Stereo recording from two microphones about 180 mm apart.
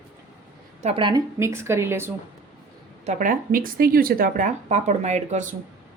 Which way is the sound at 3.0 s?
45° right (ahead or behind).